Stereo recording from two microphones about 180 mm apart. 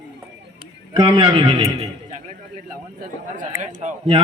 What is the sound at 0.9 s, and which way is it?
Speech, 30° right (ahead or behind).